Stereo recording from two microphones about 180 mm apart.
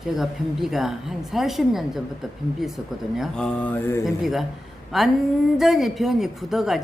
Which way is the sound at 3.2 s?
5° left (ahead or behind).